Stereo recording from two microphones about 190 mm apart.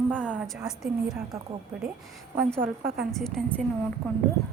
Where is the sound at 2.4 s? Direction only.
5° left (ahead or behind).